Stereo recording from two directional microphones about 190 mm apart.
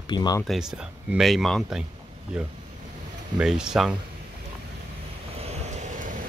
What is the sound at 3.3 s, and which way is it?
Speech, 5° right (ahead or behind).